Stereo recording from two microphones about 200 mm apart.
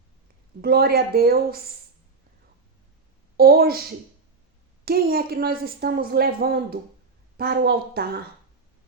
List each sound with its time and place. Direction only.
0.6 s a woman's voice: 50° right (ahead or behind)
3.3 s a woman's voice: 50° right (ahead or behind)
4.9 s a woman's voice: 50° right (ahead or behind)